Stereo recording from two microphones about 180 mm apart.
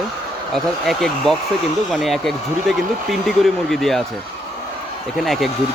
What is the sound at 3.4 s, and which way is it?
Speech, centre (ahead or behind).